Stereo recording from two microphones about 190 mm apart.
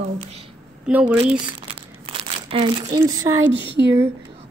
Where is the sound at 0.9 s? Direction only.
10° right (ahead or behind).